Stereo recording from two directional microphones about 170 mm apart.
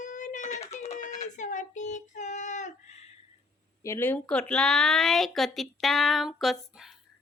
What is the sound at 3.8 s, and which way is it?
Speech, 15° left (ahead or behind).